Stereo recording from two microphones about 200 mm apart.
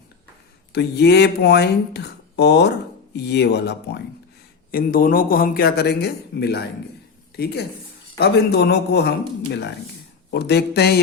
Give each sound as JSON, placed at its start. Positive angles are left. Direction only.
{"t": 0.7, "sound": "speech", "side_deg": 55}
{"t": 4.7, "sound": "a man's voice", "side_deg": 45}